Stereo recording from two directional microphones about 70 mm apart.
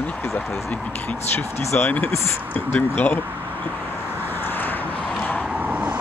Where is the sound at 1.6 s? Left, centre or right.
Left.